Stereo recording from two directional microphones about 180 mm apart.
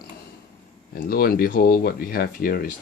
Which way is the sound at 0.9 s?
55° left (ahead or behind).